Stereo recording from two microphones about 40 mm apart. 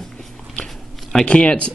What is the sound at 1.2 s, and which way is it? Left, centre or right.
Speech, left.